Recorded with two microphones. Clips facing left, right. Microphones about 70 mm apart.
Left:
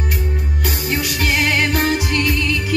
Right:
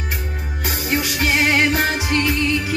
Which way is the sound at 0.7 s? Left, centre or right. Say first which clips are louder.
Right 1 dB; right.